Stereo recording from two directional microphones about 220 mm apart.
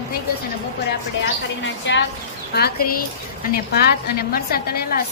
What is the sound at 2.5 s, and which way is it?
A woman's voice, 45° left (ahead or behind).